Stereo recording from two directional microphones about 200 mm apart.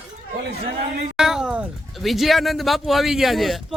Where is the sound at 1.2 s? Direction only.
5° right (ahead or behind).